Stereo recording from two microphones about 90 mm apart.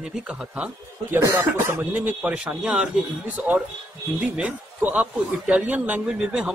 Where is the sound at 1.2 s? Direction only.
25° right (ahead or behind).